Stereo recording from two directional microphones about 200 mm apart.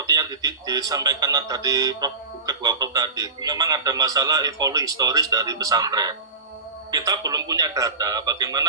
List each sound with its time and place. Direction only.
0.0 s a man's voice: 20° right (ahead or behind)